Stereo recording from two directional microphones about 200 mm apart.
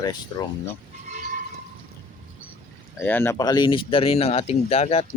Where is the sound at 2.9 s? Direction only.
10° left (ahead or behind); by 5.0 s 30° left (ahead or behind).